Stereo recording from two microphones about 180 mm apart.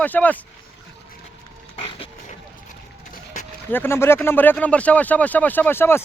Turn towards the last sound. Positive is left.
turn(degrees=15)  # may be behind; listen again after turning